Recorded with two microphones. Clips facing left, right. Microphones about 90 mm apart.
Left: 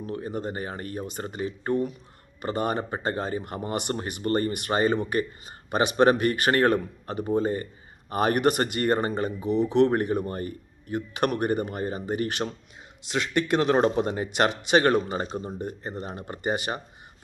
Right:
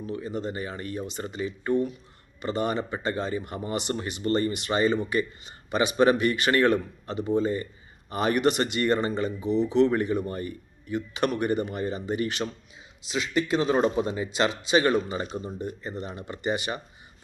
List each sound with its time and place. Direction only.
0.0 s speech: 50° left (ahead or behind)
10.2 s speech: 40° left (ahead or behind)
13.1 s a man's voice: 65° left (ahead or behind); by 15.4 s 40° left (ahead or behind)
15.6 s speech: 55° left (ahead or behind)